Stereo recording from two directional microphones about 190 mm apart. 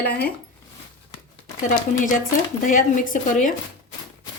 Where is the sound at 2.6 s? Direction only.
45° left (ahead or behind).